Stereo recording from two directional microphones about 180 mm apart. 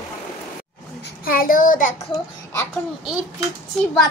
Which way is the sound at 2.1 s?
5° left (ahead or behind).